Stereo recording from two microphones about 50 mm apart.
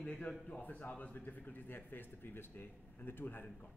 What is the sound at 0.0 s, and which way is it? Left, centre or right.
Speech, centre.